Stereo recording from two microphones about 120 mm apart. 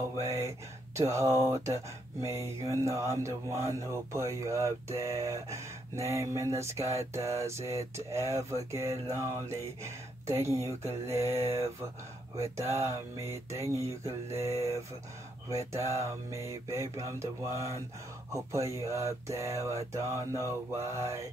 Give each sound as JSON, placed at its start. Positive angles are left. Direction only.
{"t": 0.2, "sound": "mantra", "side_deg": -25}
{"t": 16.0, "sound": "mantra", "side_deg": -25}